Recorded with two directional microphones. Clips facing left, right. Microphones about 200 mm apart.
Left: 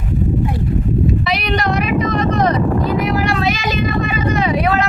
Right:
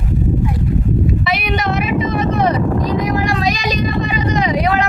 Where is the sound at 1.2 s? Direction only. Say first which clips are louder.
Even; 5° right (ahead or behind).